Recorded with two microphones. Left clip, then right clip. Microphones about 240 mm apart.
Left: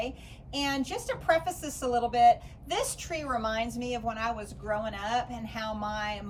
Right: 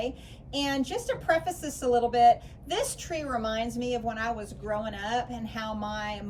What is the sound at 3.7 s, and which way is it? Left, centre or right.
A woman's voice, centre.